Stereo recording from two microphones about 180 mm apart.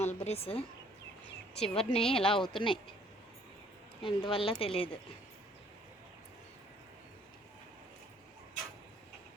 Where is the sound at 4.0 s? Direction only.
30° left (ahead or behind).